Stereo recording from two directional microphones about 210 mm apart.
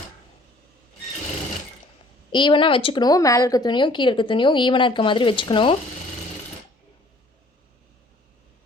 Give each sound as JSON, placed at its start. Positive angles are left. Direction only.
{"t": 2.3, "sound": "speech", "side_deg": 20}